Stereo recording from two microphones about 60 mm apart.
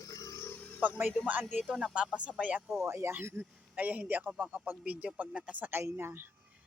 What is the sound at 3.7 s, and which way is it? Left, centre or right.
Speech, right.